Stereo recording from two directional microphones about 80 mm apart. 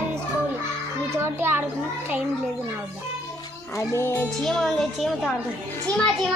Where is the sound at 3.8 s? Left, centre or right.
Left.